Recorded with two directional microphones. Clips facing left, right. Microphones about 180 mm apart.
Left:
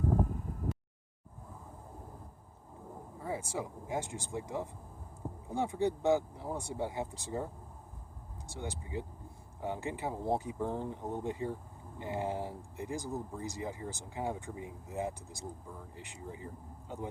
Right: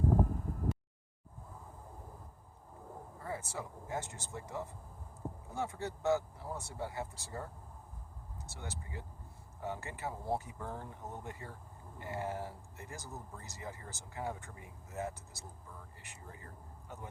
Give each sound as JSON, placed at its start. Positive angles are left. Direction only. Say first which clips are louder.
{"t": 3.2, "sound": "speech", "louder": "left 5 dB", "side_deg": 15}